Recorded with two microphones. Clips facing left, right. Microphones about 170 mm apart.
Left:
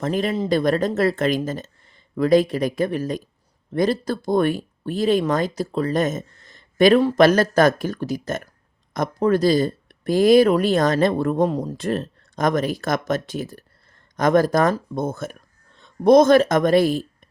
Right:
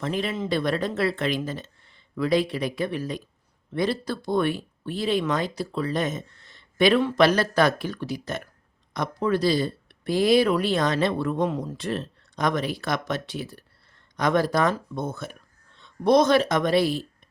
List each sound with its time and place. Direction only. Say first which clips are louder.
0.0 s speech: left 5 dB; 45° left (ahead or behind)